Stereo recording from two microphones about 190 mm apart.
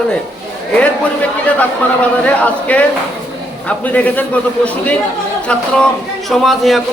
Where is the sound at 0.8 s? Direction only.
5° left (ahead or behind).